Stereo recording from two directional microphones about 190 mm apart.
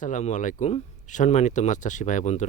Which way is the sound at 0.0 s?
40° left (ahead or behind).